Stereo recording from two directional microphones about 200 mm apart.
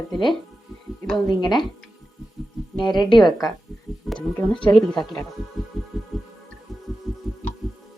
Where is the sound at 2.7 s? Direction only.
20° left (ahead or behind).